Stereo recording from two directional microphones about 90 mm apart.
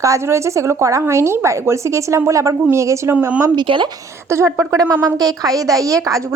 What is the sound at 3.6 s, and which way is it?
Speech, 70° right (ahead or behind).